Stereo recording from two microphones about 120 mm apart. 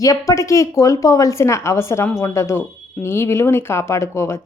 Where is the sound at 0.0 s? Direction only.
30° left (ahead or behind).